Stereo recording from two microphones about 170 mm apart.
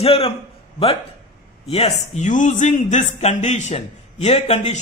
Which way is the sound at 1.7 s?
35° left (ahead or behind).